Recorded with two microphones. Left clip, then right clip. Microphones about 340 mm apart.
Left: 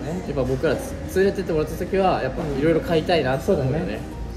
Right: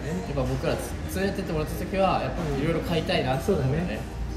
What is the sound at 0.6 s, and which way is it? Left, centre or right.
Speech, centre.